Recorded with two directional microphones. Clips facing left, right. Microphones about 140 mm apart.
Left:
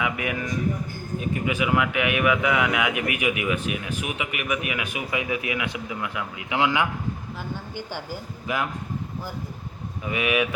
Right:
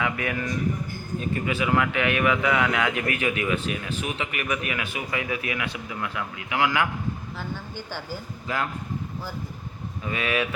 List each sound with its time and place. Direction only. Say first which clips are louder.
0.0 s a man's voice: even; 15° left (ahead or behind)
7.9 s a man's voice: left 1 dB; 15° left (ahead or behind)
10.1 s a man's voice: left 3 dB; 15° left (ahead or behind)